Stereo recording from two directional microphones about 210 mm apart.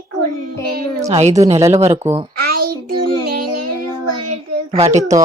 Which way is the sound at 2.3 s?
45° right (ahead or behind).